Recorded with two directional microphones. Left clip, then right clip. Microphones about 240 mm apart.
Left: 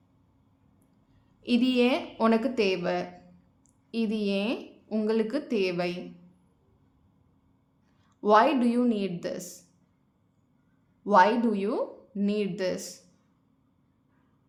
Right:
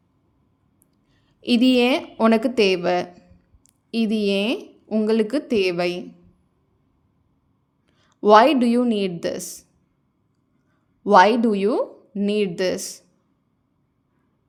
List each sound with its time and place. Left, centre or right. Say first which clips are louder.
1.4 s a woman's voice: right 7 dB; right
8.0 s speech: right 8 dB; right
11.0 s speech: right 7 dB; right